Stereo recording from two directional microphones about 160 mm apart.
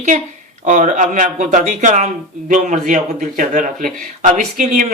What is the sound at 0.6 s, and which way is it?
A man's voice, 50° right (ahead or behind).